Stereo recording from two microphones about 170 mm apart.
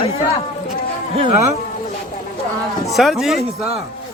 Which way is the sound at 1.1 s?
35° right (ahead or behind).